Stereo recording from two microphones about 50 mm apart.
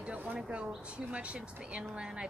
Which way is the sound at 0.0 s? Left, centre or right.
Right.